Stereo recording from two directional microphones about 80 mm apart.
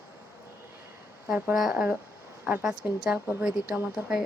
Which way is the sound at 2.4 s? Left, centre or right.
Right.